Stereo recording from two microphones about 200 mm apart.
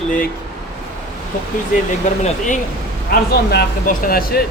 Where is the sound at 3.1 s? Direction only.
50° left (ahead or behind).